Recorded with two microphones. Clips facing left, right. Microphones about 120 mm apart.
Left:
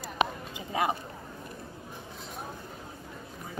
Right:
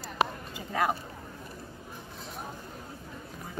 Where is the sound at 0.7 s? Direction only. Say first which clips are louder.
Even; 15° left (ahead or behind).